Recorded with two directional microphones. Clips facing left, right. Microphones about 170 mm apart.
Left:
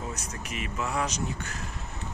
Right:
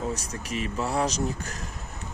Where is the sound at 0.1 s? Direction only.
35° right (ahead or behind).